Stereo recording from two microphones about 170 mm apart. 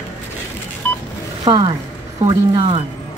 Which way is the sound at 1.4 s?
25° right (ahead or behind).